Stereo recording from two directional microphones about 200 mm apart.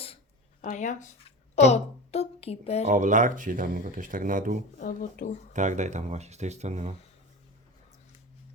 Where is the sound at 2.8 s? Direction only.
40° right (ahead or behind).